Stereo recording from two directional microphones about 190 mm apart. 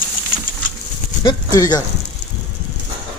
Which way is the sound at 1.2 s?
20° left (ahead or behind).